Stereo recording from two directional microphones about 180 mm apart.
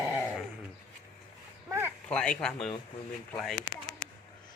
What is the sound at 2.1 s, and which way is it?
Speech, 5° left (ahead or behind).